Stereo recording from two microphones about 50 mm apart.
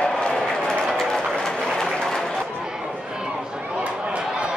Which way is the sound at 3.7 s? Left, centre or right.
Right.